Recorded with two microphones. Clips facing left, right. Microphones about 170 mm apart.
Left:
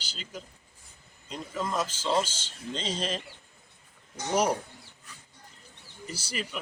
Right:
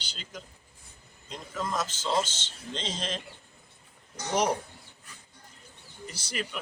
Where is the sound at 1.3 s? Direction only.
10° left (ahead or behind).